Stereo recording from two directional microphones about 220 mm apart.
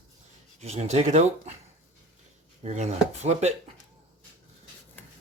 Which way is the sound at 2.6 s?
30° right (ahead or behind).